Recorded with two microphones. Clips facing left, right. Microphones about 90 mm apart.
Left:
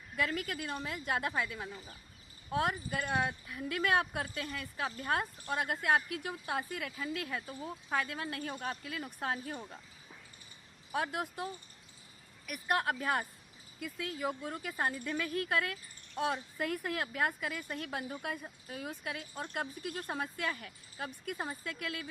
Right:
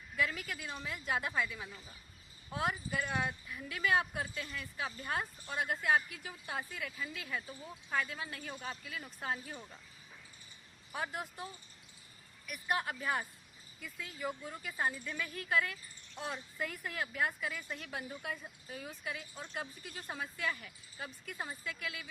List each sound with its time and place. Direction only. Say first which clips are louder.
0.2 s speech: left 2 dB; 55° left (ahead or behind)
10.9 s speech: left 5 dB; 60° left (ahead or behind)
12.5 s speech: left 4 dB; 55° left (ahead or behind)